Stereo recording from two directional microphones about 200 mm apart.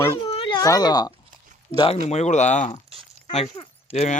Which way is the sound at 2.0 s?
35° left (ahead or behind).